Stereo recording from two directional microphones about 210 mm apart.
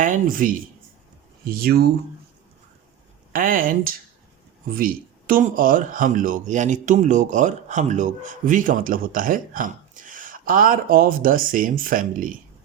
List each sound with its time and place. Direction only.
0.0 s speech: 40° right (ahead or behind)
3.3 s speech: 40° right (ahead or behind)